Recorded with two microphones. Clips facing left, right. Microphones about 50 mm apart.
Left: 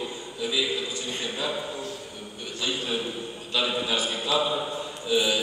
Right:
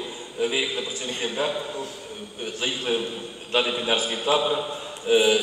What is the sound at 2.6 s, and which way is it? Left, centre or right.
A man's voice, right.